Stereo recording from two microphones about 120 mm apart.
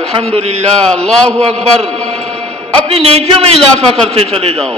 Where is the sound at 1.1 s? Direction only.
5° left (ahead or behind).